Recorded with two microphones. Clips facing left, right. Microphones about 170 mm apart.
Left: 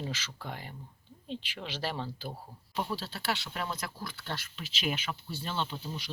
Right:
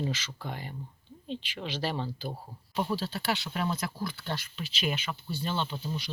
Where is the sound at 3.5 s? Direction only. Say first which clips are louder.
Right 5 dB; 15° right (ahead or behind).